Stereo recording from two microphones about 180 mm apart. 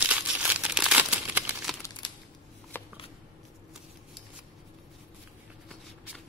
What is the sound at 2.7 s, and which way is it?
Shuffling cards, 10° left (ahead or behind).